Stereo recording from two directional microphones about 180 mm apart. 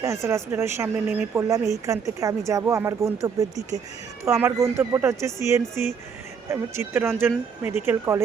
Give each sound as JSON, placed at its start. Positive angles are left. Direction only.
{"t": 0.0, "sound": "speech", "side_deg": -15}